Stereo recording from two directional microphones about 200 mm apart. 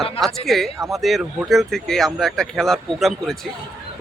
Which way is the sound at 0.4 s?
Centre (ahead or behind).